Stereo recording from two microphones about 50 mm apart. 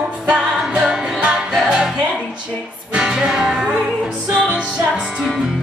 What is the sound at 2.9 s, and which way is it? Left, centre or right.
Music, centre.